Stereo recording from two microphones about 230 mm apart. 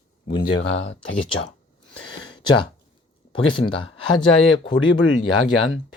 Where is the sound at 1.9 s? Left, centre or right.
Left.